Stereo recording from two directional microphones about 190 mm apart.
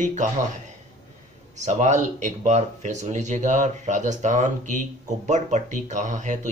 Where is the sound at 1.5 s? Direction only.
40° right (ahead or behind).